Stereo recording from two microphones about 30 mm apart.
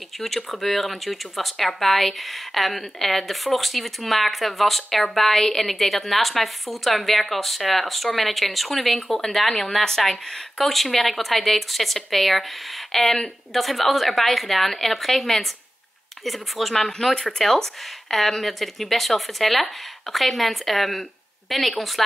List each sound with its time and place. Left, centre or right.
0.5 s a woman's voice: centre
10.6 s speech: centre
17.1 s speech: left
18.1 s speech: centre